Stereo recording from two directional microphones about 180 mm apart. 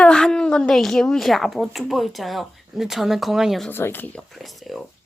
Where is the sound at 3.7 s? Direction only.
10° left (ahead or behind).